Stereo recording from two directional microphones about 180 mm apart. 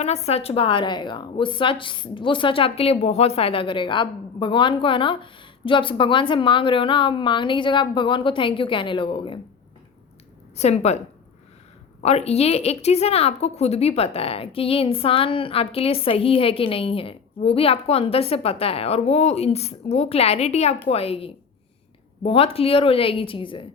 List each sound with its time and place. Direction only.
0.0 s a woman's voice: 35° left (ahead or behind)
10.6 s a woman's voice: 35° left (ahead or behind)
12.0 s a woman's voice: 35° left (ahead or behind)